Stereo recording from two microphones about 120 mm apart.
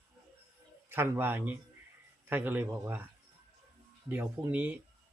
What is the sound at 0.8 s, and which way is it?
Speech, 20° right (ahead or behind).